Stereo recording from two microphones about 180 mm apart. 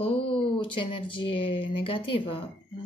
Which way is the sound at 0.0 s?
30° left (ahead or behind).